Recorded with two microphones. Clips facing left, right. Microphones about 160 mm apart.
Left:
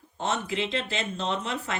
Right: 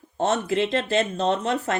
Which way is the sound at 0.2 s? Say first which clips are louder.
Right 7 dB; 45° right (ahead or behind).